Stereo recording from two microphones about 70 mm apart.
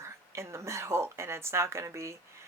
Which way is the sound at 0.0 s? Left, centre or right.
Right.